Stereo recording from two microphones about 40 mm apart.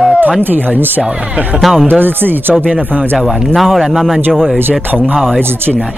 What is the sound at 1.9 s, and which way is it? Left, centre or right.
Speech, right.